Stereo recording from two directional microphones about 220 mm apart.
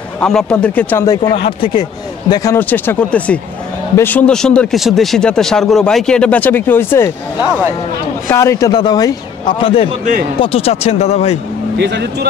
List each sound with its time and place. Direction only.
0.2 s speech: 5° left (ahead or behind)
8.3 s speech: 10° left (ahead or behind); by 11.3 s 30° left (ahead or behind)
11.8 s speech: 50° right (ahead or behind)